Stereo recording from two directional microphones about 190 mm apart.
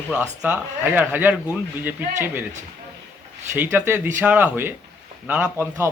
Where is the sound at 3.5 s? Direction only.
10° right (ahead or behind).